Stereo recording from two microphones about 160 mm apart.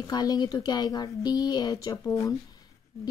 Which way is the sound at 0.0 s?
25° left (ahead or behind).